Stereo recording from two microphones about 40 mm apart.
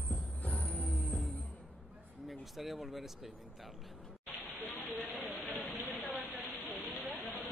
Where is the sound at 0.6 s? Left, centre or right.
Left.